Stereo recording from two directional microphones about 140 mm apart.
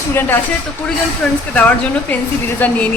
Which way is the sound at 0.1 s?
15° left (ahead or behind).